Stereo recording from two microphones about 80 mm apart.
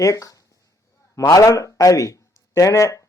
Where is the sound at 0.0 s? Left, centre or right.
Left.